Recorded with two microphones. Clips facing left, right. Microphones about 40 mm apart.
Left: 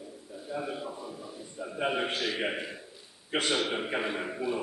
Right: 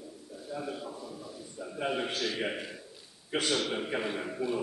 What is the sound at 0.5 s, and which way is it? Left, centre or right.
A man's voice, centre.